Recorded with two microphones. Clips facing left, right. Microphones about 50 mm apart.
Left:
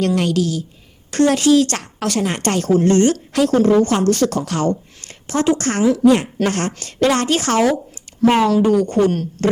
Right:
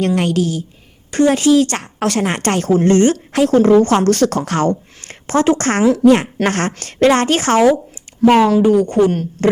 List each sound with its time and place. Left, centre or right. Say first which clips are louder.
0.0 s speech: right 1 dB; right
2.0 s a woman's voice: right 3 dB; right
7.1 s a woman's voice: right 3 dB; right
8.4 s speech: right 2 dB; centre